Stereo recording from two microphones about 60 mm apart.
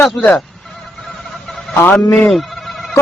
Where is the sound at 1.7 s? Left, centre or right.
Left.